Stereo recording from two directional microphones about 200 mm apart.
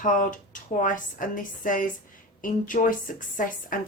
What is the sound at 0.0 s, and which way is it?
A woman's voice, 40° left (ahead or behind).